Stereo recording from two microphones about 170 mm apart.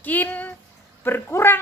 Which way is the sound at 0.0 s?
10° left (ahead or behind).